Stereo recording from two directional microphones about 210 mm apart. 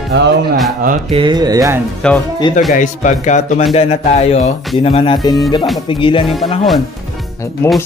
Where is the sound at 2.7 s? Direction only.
35° left (ahead or behind).